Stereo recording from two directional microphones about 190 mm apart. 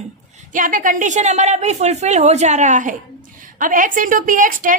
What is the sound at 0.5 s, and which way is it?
A woman's voice, 45° right (ahead or behind).